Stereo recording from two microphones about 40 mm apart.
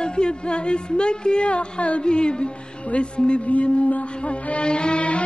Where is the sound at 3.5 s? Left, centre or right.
Left.